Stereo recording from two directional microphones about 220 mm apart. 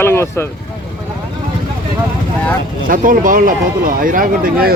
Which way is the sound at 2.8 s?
40° right (ahead or behind).